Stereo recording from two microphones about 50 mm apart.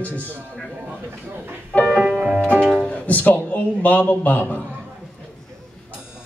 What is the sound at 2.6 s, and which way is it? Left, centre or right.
Music, centre.